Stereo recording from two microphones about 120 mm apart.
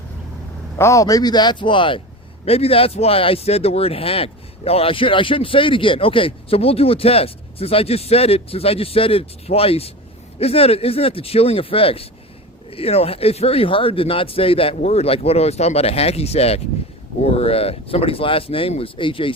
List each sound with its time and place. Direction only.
0.8 s speech: 25° left (ahead or behind); by 2.0 s 45° left (ahead or behind)
2.4 s speech: 55° left (ahead or behind)
14.8 s speech: 60° left (ahead or behind); by 19.3 s 45° left (ahead or behind)